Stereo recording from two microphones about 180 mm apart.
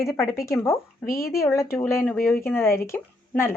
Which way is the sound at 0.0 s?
15° left (ahead or behind).